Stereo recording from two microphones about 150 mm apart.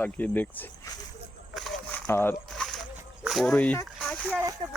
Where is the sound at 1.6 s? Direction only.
Centre (ahead or behind).